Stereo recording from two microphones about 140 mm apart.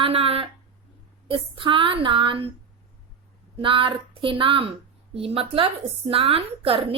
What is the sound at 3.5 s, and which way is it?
A woman's voice, 40° right (ahead or behind).